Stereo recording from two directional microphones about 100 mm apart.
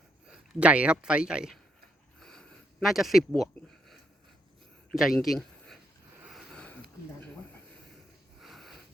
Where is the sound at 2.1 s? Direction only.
5° left (ahead or behind).